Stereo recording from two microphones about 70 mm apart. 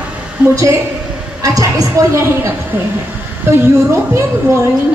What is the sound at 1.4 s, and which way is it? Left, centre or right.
Speech, right.